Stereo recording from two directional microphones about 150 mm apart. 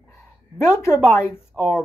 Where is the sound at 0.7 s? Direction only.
15° left (ahead or behind).